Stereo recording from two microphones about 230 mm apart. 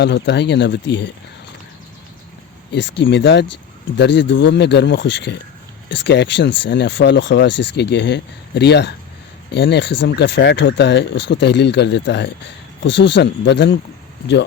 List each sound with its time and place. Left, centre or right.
0.0 s a man's voice: left
2.7 s a man's voice: left